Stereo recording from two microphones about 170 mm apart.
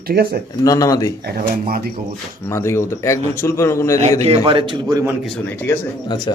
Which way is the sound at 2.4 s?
15° left (ahead or behind).